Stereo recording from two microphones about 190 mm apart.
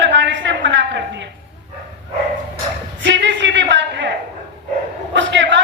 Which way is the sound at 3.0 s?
70° right (ahead or behind).